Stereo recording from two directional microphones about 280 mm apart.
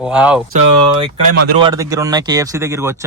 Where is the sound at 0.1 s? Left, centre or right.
Centre.